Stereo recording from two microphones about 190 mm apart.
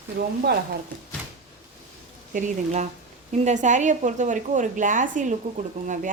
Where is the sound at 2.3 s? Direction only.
40° right (ahead or behind).